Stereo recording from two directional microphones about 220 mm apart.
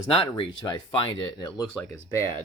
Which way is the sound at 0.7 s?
20° left (ahead or behind).